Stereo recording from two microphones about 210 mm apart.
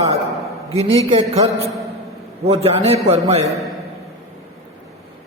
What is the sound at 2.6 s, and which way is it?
Speech, 30° right (ahead or behind).